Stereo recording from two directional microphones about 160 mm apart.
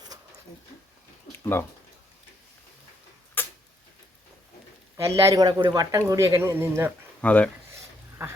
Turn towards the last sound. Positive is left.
turn(degrees=10)  # may be behind; listen again after turning